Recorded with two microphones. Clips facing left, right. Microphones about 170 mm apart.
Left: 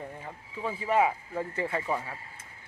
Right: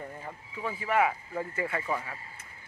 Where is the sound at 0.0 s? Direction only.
Centre (ahead or behind).